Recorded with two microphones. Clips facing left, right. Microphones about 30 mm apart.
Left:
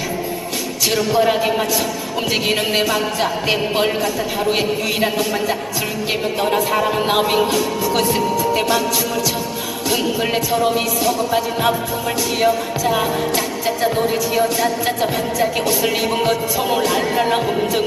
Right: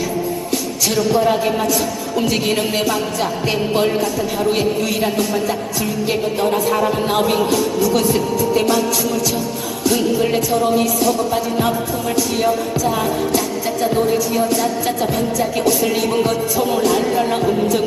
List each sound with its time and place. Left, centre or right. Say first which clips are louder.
0.9 s music: right 1 dB; centre
9.8 s music: right 3 dB; left